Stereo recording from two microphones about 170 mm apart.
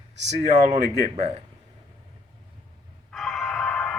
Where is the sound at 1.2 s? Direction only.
35° right (ahead or behind).